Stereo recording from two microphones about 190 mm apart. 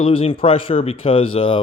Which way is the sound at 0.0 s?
30° left (ahead or behind).